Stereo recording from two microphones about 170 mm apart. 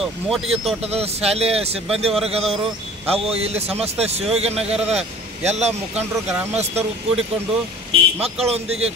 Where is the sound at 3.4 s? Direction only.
35° right (ahead or behind).